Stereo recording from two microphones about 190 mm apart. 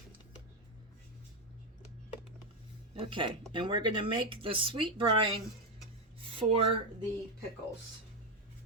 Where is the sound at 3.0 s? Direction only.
25° right (ahead or behind).